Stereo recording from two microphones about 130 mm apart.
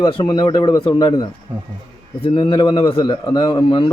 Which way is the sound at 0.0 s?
40° left (ahead or behind).